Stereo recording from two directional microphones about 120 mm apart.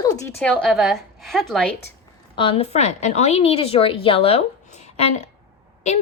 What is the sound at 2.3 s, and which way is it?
A woman's voice, 50° left (ahead or behind).